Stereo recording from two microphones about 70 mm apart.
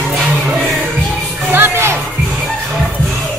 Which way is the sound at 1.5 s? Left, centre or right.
Right.